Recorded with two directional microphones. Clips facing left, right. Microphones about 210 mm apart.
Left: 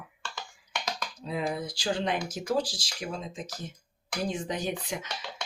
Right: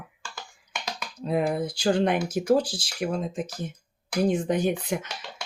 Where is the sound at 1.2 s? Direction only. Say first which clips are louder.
Right 7 dB; 55° right (ahead or behind).